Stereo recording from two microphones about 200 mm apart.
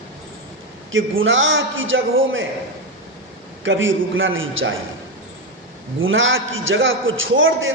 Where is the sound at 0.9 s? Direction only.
75° right (ahead or behind).